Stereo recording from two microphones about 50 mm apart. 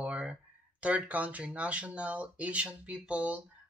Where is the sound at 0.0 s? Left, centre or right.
Right.